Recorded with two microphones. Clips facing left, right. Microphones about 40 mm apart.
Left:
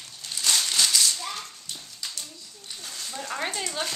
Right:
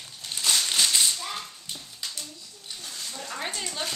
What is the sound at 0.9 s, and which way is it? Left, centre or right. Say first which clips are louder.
Whip: even; right.